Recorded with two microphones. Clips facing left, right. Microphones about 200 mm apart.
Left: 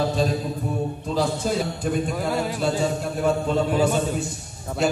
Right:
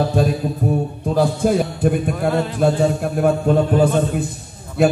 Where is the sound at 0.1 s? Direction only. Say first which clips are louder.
Right 4 dB; 55° right (ahead or behind).